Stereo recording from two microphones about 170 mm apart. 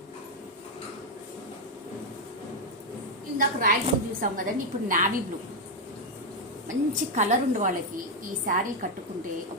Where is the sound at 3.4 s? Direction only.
55° right (ahead or behind).